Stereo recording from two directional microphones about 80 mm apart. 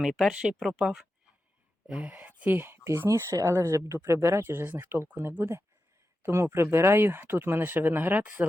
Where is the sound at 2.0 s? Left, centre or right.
Centre.